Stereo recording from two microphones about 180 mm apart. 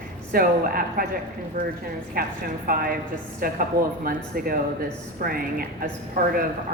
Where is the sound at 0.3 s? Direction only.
50° right (ahead or behind).